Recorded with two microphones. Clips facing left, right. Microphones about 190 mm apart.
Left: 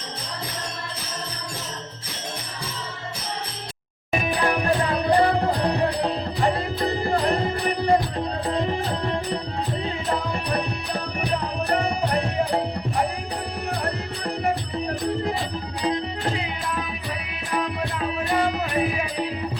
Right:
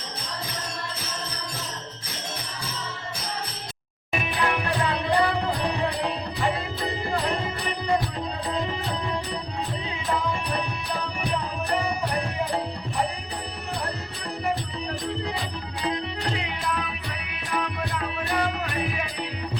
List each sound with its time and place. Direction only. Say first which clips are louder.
4.1 s music: left 4 dB; 35° left (ahead or behind)
11.7 s music: left 3 dB; 60° left (ahead or behind)
13.8 s music: left 5 dB; 60° left (ahead or behind)
15.8 s music: left 3 dB; 35° left (ahead or behind)